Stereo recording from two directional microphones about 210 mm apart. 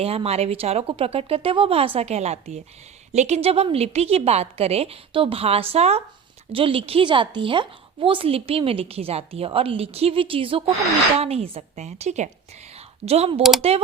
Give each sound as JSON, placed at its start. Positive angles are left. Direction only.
{"t": 0.0, "sound": "a woman's voice", "side_deg": -30}